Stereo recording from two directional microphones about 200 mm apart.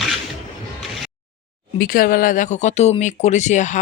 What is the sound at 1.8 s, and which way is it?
Speech, 45° left (ahead or behind).